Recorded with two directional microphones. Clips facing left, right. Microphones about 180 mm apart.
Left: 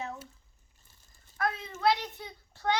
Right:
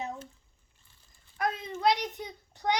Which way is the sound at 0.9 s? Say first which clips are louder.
Left 2 dB; 45° left (ahead or behind).